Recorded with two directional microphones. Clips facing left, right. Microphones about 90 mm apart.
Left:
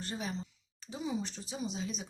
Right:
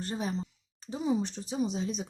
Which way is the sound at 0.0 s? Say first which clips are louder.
Right 5 dB; 35° right (ahead or behind).